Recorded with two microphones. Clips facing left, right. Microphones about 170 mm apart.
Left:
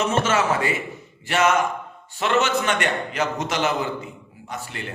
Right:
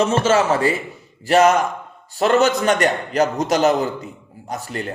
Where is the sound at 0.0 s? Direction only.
30° right (ahead or behind).